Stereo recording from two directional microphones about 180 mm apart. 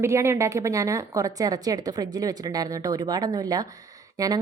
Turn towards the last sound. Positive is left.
turn(degrees=-20)  # may be behind; listen again after turning